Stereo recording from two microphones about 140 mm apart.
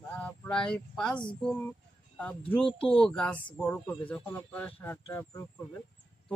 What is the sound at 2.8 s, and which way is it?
Speech, 5° left (ahead or behind).